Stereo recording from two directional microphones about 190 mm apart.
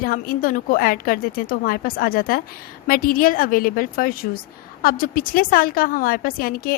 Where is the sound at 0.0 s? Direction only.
50° left (ahead or behind).